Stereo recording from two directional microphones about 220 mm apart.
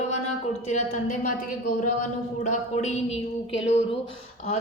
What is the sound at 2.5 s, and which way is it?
A woman's voice, 30° left (ahead or behind).